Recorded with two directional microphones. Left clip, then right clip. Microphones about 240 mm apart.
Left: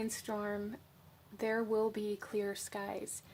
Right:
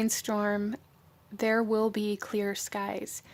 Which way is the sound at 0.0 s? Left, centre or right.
Right.